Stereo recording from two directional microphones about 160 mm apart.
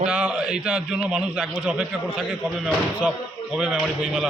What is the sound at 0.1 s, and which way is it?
A man's voice, 5° right (ahead or behind).